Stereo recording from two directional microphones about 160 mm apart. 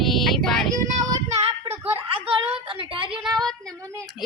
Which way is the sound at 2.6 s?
30° right (ahead or behind).